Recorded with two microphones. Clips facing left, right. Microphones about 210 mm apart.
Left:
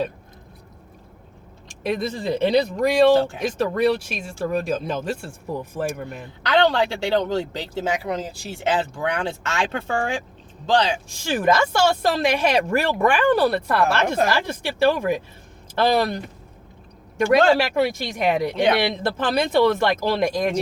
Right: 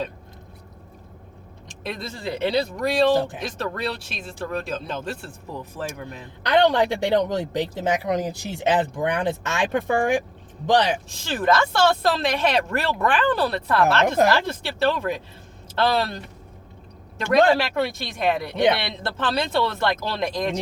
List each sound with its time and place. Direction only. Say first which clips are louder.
1.6 s speech: left 8 dB; 15° left (ahead or behind)
6.5 s speech: right 1 dB; 15° right (ahead or behind)
11.2 s speech: left 2 dB; 15° left (ahead or behind)